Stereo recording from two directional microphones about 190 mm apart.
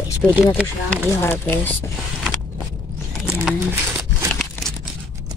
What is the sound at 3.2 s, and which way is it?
Livestock, 10° right (ahead or behind).